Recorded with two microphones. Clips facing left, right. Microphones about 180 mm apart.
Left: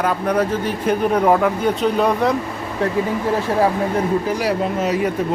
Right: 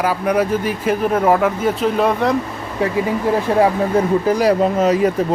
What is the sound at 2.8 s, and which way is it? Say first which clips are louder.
Speech: right 2 dB; 10° right (ahead or behind).